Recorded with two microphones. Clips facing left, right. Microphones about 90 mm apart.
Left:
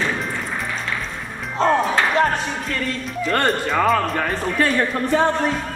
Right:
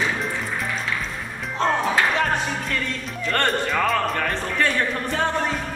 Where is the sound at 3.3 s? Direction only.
5° left (ahead or behind).